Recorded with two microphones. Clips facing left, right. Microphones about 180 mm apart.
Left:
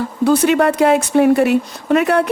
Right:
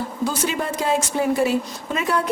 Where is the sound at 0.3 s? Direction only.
65° left (ahead or behind).